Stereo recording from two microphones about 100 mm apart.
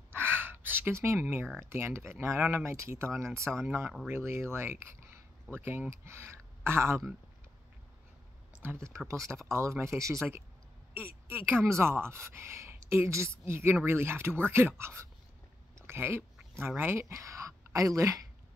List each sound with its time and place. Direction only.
0.1 s gasp: 20° right (ahead or behind)
1.7 s speech: 25° right (ahead or behind)
8.7 s speech: 30° right (ahead or behind)